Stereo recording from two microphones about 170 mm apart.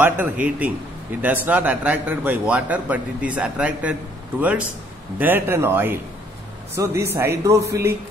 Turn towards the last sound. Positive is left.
turn(degrees=-20)  # may be behind; listen again after turning